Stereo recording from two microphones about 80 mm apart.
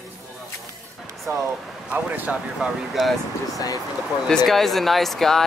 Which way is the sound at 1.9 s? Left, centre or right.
Right.